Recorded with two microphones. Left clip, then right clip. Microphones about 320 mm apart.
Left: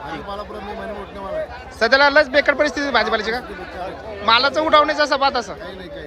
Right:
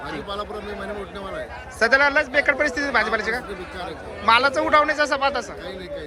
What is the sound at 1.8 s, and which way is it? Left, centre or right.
A man's voice, centre.